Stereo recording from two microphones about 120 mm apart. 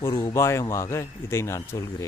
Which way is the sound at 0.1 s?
35° left (ahead or behind).